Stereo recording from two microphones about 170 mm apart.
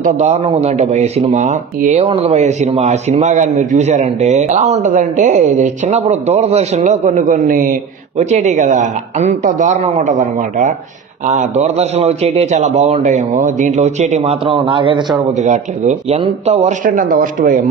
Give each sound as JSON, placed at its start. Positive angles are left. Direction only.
{"t": 0.0, "sound": "a man's voice", "side_deg": -40}
{"t": 15.3, "sound": "a man's voice", "side_deg": -45}